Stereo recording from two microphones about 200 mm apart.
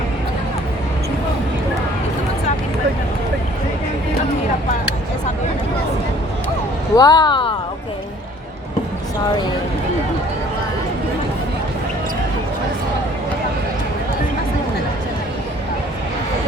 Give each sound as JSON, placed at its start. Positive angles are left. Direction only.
{"t": 6.9, "sound": "speech", "side_deg": 20}